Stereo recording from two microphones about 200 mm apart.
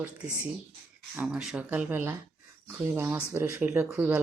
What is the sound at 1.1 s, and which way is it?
Speech, 5° right (ahead or behind).